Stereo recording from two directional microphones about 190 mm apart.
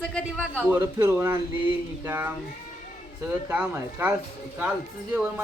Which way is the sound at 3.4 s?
10° right (ahead or behind).